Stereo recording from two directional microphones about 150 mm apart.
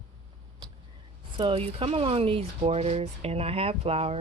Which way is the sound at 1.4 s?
40° right (ahead or behind).